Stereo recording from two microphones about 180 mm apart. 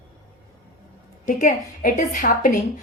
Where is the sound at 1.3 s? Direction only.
45° left (ahead or behind).